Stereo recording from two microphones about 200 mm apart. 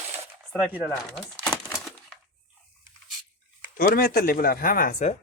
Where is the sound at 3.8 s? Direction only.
45° left (ahead or behind).